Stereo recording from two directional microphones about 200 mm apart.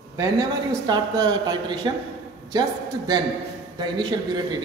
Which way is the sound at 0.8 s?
20° right (ahead or behind).